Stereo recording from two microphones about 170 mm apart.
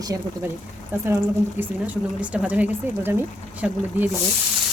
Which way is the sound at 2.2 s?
10° right (ahead or behind).